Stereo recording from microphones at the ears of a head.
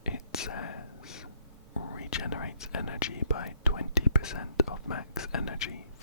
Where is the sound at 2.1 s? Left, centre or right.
Left.